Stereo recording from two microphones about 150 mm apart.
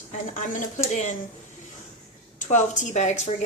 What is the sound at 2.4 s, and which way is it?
Speech, 55° left (ahead or behind).